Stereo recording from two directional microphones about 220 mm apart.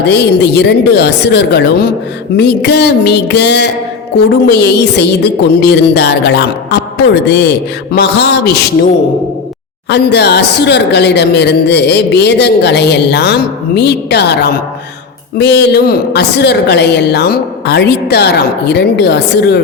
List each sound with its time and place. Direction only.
0.1 s speech: 50° left (ahead or behind)
9.9 s speech: 50° left (ahead or behind)